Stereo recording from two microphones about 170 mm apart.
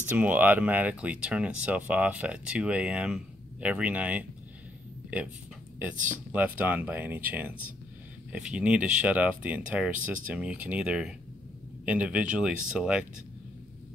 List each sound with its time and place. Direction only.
0.0 s speech: 10° right (ahead or behind)
6.3 s speech: 10° right (ahead or behind)